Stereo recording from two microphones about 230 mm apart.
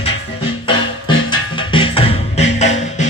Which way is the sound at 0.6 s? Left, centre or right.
Left.